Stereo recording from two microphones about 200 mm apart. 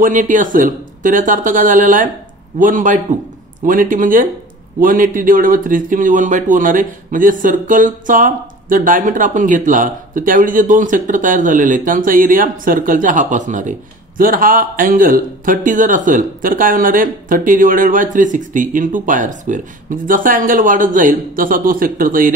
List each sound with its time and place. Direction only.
0.0 s speech: 40° right (ahead or behind)